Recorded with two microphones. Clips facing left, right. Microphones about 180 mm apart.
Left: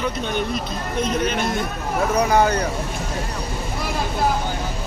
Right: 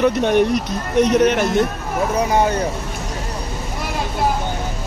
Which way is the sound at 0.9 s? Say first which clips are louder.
Right 9 dB; 75° right (ahead or behind).